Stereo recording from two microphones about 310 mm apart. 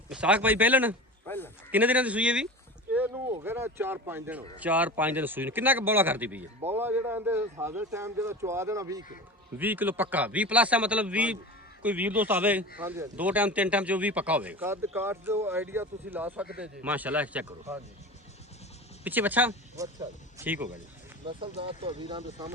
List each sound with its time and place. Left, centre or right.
0.1 s speech: centre
1.3 s a man's voice: centre
1.7 s speech: centre
2.9 s a sound: centre
3.3 s speech: centre
19.0 s speech: centre
21.2 s speech: centre